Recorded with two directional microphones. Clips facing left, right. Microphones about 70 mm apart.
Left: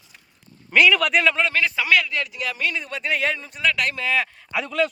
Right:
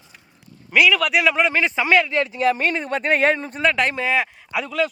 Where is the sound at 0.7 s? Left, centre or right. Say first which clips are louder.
Even; centre; by 4.3 s right.